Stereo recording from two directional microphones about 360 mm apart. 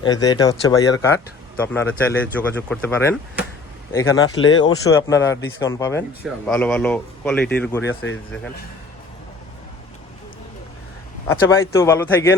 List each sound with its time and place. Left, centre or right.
0.0 s speech: centre
4.4 s speech: left
4.6 s speech: centre
7.9 s speech: left
11.3 s speech: centre